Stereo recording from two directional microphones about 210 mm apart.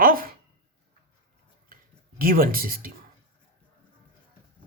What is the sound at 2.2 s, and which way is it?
Speech, 45° right (ahead or behind).